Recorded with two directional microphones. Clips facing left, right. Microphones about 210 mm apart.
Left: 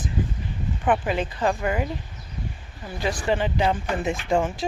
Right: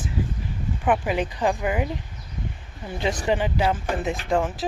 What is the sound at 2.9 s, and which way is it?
Speech, 20° right (ahead or behind).